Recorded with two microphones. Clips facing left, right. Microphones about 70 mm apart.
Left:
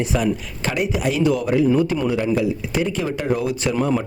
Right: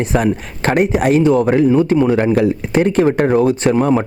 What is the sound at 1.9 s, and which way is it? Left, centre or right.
Speech, right.